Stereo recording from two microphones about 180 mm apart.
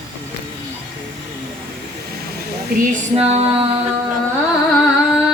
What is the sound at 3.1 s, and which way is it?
Music, 35° right (ahead or behind).